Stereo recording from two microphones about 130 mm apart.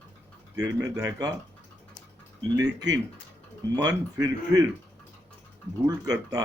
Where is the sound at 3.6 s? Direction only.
30° right (ahead or behind).